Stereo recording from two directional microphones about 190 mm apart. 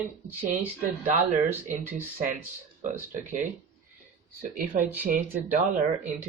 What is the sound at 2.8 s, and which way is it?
Speech, 40° right (ahead or behind).